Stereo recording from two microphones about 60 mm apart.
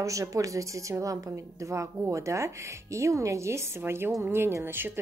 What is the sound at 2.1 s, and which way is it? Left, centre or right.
A woman's voice, right.